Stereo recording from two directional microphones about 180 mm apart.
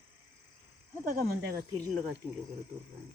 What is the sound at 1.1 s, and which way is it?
Speech, 60° right (ahead or behind).